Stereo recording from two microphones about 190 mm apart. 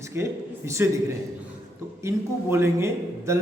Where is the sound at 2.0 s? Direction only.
15° right (ahead or behind).